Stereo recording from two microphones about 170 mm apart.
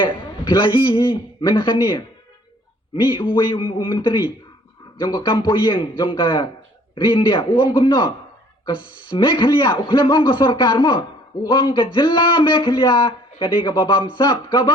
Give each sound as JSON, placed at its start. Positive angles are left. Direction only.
{"t": 0.0, "sound": "a man's voice", "side_deg": 25}